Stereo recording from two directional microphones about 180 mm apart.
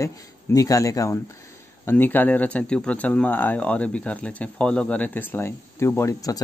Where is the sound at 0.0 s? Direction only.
15° left (ahead or behind).